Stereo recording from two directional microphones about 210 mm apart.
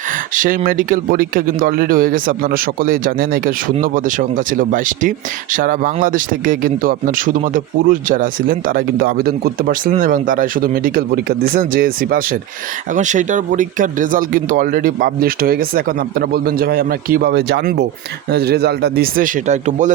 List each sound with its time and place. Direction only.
0.3 s speech: 40° right (ahead or behind)